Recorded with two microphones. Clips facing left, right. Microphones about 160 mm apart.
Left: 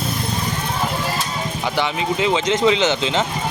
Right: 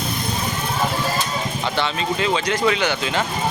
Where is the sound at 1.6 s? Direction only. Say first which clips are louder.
Left 3 dB; 15° left (ahead or behind).